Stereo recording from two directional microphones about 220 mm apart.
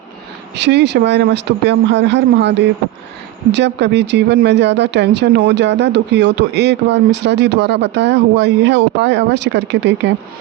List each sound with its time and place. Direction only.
0.5 s speech: 50° right (ahead or behind)